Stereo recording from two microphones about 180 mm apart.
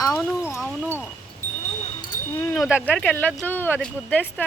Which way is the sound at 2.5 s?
5° right (ahead or behind).